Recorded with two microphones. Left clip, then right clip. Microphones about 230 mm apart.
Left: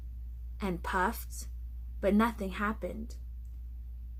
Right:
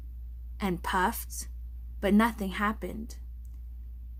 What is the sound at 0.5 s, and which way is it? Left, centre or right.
A woman's voice, right.